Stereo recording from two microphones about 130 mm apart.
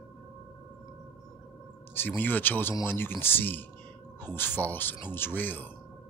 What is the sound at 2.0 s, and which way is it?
Speech, 15° left (ahead or behind).